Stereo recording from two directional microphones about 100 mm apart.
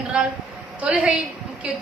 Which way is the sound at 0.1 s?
10° right (ahead or behind).